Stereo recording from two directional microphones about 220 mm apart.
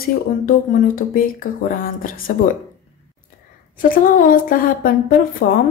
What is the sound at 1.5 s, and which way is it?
Speech, 40° left (ahead or behind).